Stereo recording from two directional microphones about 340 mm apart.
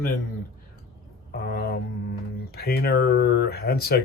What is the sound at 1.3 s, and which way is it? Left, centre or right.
Speech, left.